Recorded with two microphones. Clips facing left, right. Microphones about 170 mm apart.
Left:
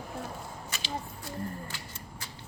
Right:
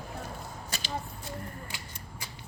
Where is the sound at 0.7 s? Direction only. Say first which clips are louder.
Right 4 dB; 35° right (ahead or behind).